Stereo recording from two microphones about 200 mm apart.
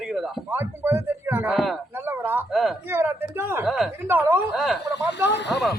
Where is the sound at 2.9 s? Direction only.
10° right (ahead or behind).